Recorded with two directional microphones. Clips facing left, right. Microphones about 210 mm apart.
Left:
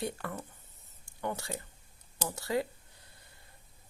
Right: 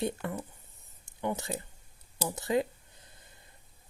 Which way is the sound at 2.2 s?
20° right (ahead or behind).